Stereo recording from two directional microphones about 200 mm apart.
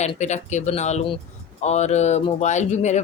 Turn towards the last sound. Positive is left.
turn(degrees=35)  # may be behind; listen again after turning